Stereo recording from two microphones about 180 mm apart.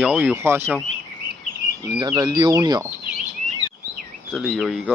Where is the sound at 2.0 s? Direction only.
20° right (ahead or behind).